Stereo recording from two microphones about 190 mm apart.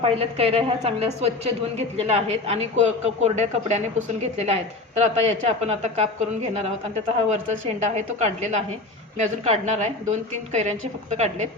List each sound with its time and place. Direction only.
0.0 s speech: 30° right (ahead or behind)